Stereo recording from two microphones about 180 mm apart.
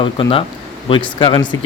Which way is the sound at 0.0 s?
30° left (ahead or behind).